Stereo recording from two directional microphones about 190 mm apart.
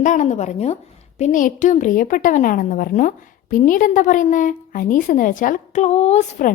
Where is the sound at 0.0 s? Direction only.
40° left (ahead or behind).